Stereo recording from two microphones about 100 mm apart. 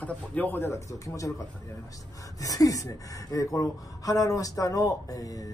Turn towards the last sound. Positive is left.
turn(degrees=35)  # may be behind; listen again after turning